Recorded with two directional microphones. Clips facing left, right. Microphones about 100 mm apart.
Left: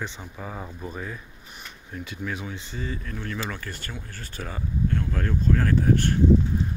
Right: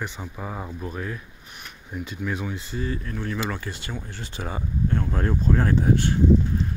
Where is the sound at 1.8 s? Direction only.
10° right (ahead or behind).